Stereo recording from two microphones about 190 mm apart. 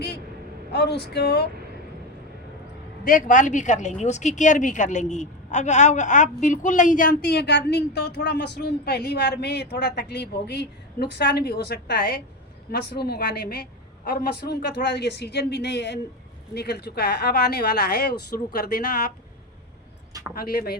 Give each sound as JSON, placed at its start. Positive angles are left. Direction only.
{"t": 0.7, "sound": "a man's voice", "side_deg": 60}
{"t": 3.0, "sound": "a woman's voice", "side_deg": 45}
{"t": 20.3, "sound": "a woman's voice", "side_deg": 50}